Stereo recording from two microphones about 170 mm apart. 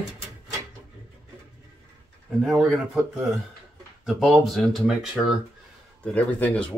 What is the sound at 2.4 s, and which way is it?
Speech, 5° right (ahead or behind).